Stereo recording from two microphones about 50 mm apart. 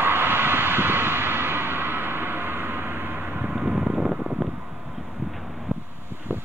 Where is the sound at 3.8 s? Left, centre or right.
Right.